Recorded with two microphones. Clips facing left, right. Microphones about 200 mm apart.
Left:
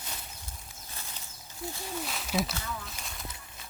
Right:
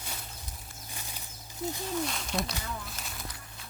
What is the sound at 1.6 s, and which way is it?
Speech, 20° right (ahead or behind).